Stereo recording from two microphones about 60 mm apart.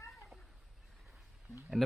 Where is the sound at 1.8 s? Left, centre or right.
Centre.